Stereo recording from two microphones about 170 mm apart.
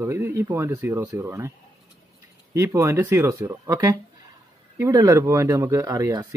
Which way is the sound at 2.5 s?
15° right (ahead or behind).